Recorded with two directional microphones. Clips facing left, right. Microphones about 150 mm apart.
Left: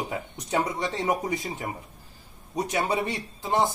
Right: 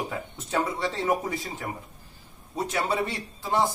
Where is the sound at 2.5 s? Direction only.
15° left (ahead or behind).